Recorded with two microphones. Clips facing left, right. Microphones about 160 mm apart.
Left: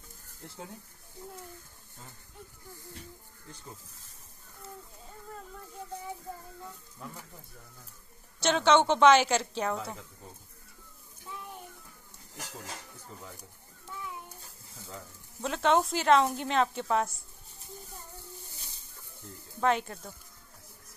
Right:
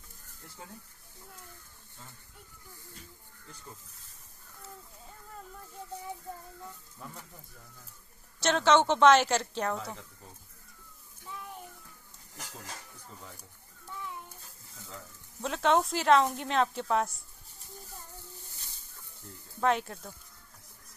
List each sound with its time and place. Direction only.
8.4 s speech: centre (ahead or behind)
15.4 s speech: centre (ahead or behind)
18.1 s a sound: 15° left (ahead or behind)
19.6 s speech: centre (ahead or behind)